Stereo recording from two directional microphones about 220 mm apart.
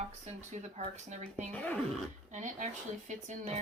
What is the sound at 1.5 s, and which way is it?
Speech, 5° left (ahead or behind).